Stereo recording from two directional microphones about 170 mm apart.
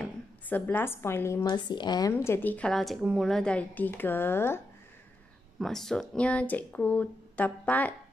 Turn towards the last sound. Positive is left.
turn(degrees=10)  # may be behind; listen again after turning